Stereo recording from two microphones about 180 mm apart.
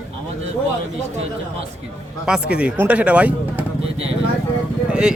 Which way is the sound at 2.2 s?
5° right (ahead or behind).